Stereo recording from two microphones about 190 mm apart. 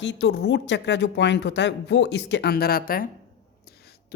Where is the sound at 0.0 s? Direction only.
65° left (ahead or behind).